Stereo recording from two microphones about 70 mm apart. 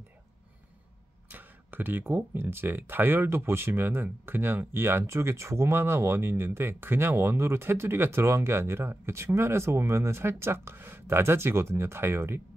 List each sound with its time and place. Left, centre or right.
1.3 s speech: right